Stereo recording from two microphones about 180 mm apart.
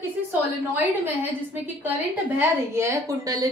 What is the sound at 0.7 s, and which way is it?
A woman's voice, 10° right (ahead or behind).